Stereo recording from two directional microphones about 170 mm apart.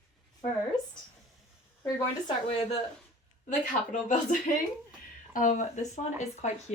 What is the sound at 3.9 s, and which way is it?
Speech, 50° left (ahead or behind).